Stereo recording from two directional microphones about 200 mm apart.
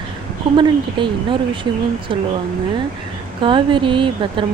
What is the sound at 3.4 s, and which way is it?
Speech, 25° right (ahead or behind).